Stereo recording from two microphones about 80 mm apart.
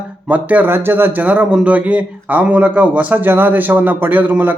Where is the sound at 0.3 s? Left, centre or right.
Centre.